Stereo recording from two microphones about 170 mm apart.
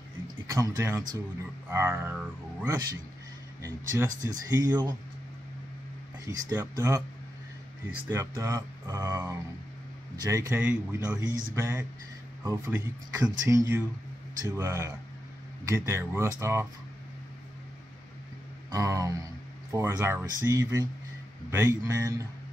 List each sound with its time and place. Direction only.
0.5 s speech: 15° right (ahead or behind)
6.2 s speech: 15° right (ahead or behind)
8.1 s speech: 15° right (ahead or behind)
18.7 s speech: 20° right (ahead or behind)